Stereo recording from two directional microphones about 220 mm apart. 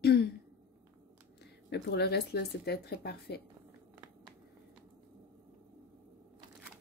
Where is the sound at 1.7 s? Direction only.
50° left (ahead or behind).